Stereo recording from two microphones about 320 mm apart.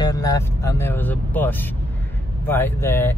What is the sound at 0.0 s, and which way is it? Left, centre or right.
Speech, centre.